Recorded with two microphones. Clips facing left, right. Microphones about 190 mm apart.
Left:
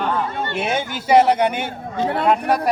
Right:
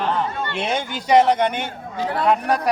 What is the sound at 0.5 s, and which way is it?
A man's voice, 5° left (ahead or behind).